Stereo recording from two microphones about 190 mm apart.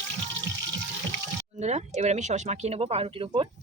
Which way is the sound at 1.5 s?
35° right (ahead or behind).